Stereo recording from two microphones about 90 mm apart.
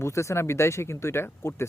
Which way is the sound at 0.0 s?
30° left (ahead or behind).